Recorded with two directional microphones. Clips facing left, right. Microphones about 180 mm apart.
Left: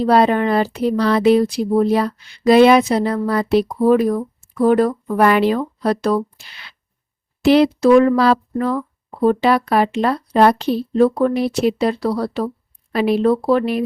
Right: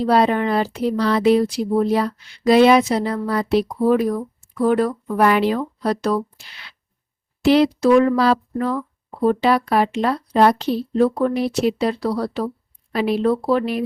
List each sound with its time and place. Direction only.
0.1 s speech: 60° left (ahead or behind)
4.6 s speech: 40° left (ahead or behind)
5.1 s speech: 60° left (ahead or behind)